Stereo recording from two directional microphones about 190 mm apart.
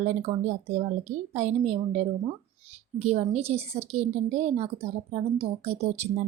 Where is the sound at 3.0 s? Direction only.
35° right (ahead or behind).